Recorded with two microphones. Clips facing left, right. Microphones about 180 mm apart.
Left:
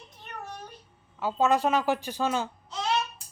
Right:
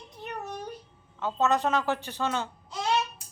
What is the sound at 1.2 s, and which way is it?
Speech, 10° left (ahead or behind).